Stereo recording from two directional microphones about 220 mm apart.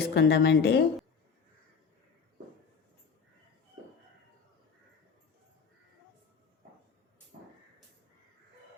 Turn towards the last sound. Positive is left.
turn(degrees=-45)  # may be behind; listen again after turning